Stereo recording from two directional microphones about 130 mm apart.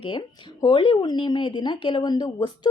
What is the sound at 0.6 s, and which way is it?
A woman's voice, 40° left (ahead or behind).